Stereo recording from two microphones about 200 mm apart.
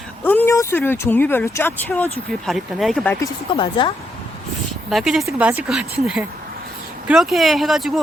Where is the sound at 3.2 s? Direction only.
25° left (ahead or behind).